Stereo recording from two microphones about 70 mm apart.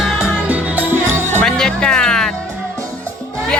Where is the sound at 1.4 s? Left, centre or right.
Centre.